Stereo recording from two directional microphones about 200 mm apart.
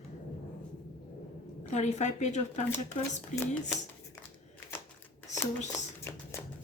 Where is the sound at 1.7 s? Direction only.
35° left (ahead or behind).